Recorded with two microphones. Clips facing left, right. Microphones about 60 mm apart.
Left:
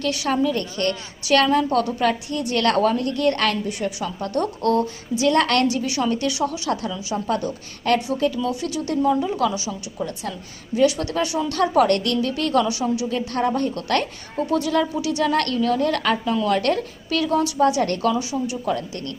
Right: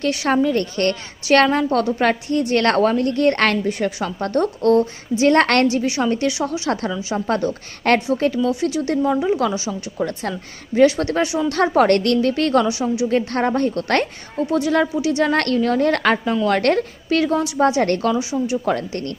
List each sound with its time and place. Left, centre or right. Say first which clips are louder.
0.0 s a woman's voice: right 3 dB; right
7.3 s a woman's voice: right 4 dB; right
8.4 s speech: right 5 dB; right
10.0 s a woman's voice: right 5 dB; right
10.8 s a woman's voice: right 4 dB; right
12.6 s speech: right 3 dB; right
13.1 s a woman's voice: right 3 dB; right
18.1 s speech: right 3 dB; right
18.6 s a woman's voice: right 3 dB; right